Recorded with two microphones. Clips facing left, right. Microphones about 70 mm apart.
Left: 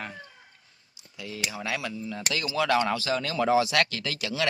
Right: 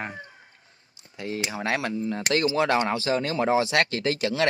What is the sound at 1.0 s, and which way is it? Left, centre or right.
Speech, right.